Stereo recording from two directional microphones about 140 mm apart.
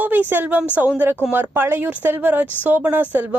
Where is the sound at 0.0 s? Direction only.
10° right (ahead or behind).